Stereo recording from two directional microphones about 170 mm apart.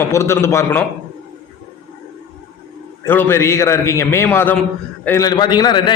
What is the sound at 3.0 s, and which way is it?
A man's voice, 15° left (ahead or behind).